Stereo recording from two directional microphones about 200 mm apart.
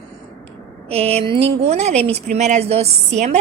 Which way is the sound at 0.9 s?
30° right (ahead or behind).